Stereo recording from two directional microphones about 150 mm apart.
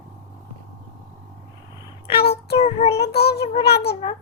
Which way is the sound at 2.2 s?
45° left (ahead or behind).